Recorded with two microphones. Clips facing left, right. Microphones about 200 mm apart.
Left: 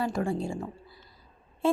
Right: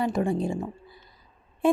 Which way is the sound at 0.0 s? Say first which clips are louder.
Right 4 dB; 20° right (ahead or behind).